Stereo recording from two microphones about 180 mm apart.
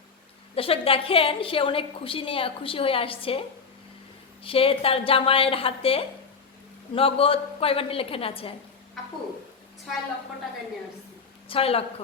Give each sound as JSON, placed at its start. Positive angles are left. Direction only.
{"t": 0.5, "sound": "a woman's voice", "side_deg": 30}
{"t": 4.4, "sound": "a woman's voice", "side_deg": 30}
{"t": 11.4, "sound": "a woman's voice", "side_deg": 30}